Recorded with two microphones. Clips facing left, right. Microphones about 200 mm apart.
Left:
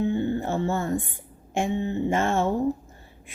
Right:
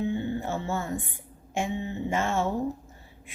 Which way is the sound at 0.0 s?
50° left (ahead or behind).